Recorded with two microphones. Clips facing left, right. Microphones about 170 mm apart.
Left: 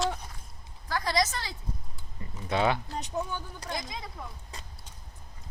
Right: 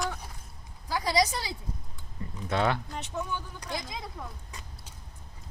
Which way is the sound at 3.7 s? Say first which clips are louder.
Right 1 dB; centre (ahead or behind).